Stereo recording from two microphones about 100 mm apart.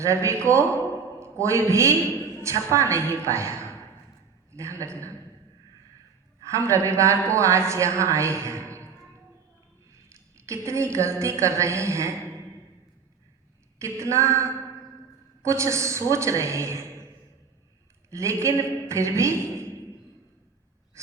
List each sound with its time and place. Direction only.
0.0 s a woman's voice: 30° right (ahead or behind)
4.5 s a woman's voice: 30° right (ahead or behind)
6.5 s a woman's voice: 30° right (ahead or behind)
10.2 s a woman's voice: 30° right (ahead or behind)
13.7 s a woman's voice: 30° right (ahead or behind)
18.1 s a woman's voice: 30° right (ahead or behind)